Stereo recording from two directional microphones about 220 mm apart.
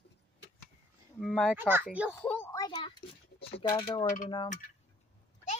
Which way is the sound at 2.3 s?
10° left (ahead or behind).